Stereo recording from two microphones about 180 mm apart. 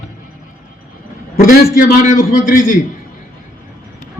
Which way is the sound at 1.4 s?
50° left (ahead or behind).